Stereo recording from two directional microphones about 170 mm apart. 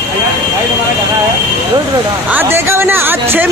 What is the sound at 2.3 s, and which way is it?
Speech, 15° right (ahead or behind).